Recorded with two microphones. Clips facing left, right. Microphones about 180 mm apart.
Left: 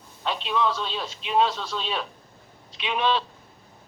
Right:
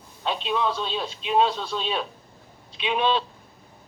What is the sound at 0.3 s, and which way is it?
A man's voice, 15° right (ahead or behind).